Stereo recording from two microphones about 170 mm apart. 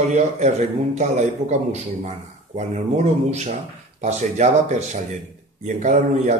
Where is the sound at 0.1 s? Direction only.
40° right (ahead or behind).